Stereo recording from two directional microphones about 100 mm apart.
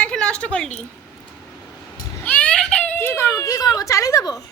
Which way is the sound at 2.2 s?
15° left (ahead or behind).